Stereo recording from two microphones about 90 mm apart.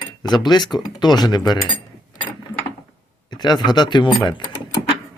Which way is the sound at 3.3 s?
50° left (ahead or behind).